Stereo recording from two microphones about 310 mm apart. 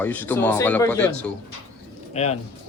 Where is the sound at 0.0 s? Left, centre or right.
Centre.